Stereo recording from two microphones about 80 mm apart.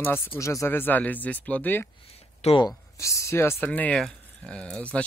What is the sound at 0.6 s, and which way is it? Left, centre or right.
Speech, left.